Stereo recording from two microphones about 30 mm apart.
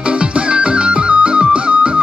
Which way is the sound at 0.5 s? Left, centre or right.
Right.